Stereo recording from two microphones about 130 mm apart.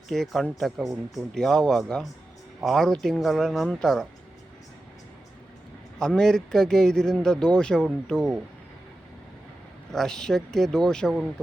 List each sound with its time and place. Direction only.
0.1 s a man's voice: centre (ahead or behind)
6.0 s a man's voice: 5° left (ahead or behind)
9.9 s a man's voice: 5° left (ahead or behind)